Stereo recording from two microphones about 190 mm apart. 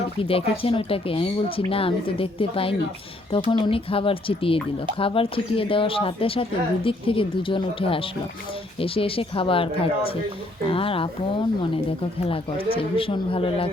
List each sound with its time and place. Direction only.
0.2 s speech: 30° left (ahead or behind)
12.2 s speech: 30° left (ahead or behind)